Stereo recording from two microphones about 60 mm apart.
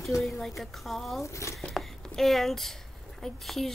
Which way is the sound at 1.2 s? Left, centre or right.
Left.